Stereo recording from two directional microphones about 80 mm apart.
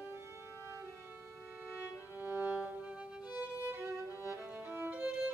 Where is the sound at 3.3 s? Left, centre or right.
Right.